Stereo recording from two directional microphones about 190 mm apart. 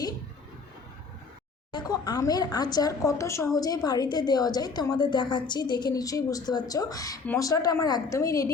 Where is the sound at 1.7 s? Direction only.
20° left (ahead or behind).